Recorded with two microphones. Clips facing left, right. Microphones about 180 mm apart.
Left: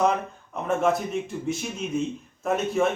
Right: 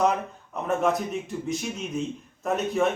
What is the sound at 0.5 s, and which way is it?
A man's voice, centre (ahead or behind).